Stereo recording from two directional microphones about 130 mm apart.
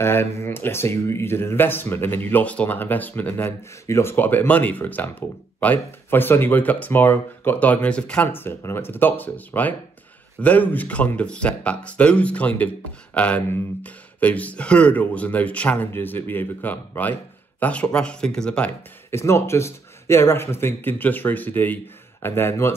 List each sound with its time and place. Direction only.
0.0 s speech: 20° left (ahead or behind)
19.0 s speech: 20° left (ahead or behind)